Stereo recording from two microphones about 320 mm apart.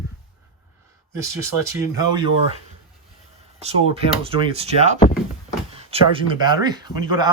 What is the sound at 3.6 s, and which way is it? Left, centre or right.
Speech, centre.